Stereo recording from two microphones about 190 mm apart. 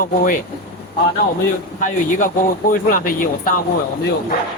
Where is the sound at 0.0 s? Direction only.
45° left (ahead or behind).